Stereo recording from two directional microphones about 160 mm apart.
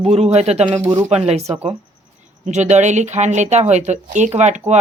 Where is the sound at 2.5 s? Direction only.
45° right (ahead or behind).